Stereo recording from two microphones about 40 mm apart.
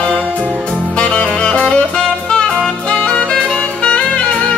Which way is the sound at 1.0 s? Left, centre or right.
Left.